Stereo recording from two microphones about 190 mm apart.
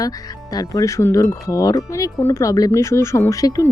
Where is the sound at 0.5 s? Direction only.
20° left (ahead or behind).